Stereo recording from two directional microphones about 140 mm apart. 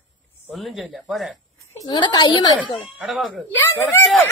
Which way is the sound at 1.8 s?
30° left (ahead or behind).